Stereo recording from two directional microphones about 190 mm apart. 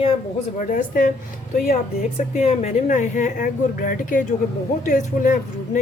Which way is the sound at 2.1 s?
35° left (ahead or behind).